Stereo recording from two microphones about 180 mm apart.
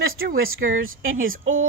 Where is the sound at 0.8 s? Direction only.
90° right.